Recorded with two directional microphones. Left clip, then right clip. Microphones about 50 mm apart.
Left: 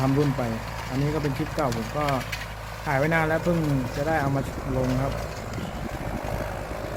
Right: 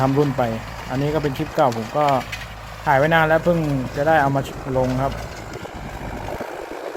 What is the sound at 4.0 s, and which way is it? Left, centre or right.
Speech, right.